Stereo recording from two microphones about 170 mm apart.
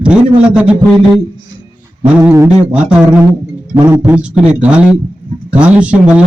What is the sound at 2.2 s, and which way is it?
Speech, 15° right (ahead or behind).